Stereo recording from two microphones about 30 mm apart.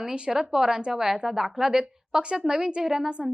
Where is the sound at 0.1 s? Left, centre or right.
Right.